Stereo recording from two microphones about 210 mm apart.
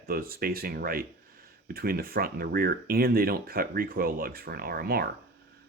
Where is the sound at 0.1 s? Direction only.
45° right (ahead or behind).